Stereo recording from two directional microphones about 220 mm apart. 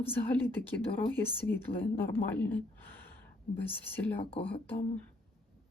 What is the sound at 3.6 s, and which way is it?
Speech, 10° left (ahead or behind).